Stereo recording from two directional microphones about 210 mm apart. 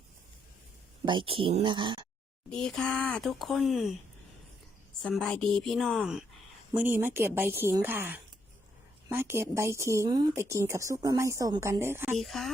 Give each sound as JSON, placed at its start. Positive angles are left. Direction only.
{"t": 1.0, "sound": "speech", "side_deg": -25}
{"t": 2.5, "sound": "speech", "side_deg": 5}
{"t": 5.0, "sound": "speech", "side_deg": 5}
{"t": 12.1, "sound": "speech", "side_deg": 0}